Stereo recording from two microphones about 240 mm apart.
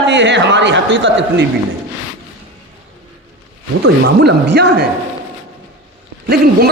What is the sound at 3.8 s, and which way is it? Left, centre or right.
Speech, right.